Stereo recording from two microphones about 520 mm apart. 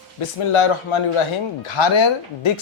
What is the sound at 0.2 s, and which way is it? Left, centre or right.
Speech, left.